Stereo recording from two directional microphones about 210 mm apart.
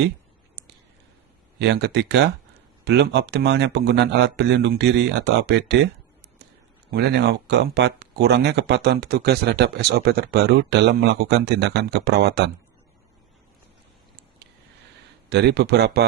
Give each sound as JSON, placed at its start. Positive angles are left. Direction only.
{"t": 1.5, "sound": "speech", "side_deg": -55}
{"t": 6.9, "sound": "speech", "side_deg": -50}
{"t": 15.3, "sound": "speech", "side_deg": -50}